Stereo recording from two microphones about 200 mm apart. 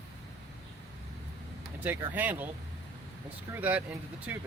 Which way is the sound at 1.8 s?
10° right (ahead or behind).